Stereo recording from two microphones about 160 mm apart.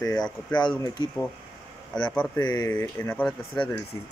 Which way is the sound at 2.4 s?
25° left (ahead or behind).